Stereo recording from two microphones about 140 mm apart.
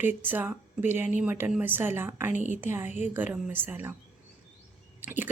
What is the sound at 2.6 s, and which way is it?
A woman's voice, 15° right (ahead or behind).